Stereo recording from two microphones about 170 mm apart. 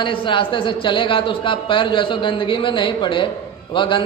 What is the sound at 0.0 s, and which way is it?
A man's voice, 30° left (ahead or behind).